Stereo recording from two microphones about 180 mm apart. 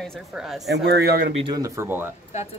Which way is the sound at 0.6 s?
65° right (ahead or behind).